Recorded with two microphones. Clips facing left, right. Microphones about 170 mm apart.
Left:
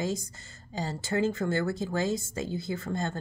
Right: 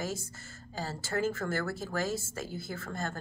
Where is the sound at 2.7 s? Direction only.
15° left (ahead or behind).